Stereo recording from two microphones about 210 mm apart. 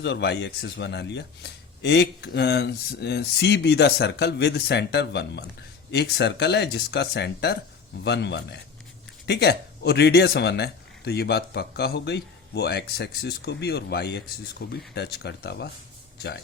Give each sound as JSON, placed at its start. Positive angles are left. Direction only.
{"t": 0.0, "sound": "a man's voice", "side_deg": 55}